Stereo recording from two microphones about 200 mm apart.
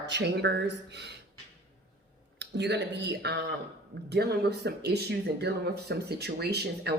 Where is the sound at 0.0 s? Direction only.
60° right (ahead or behind).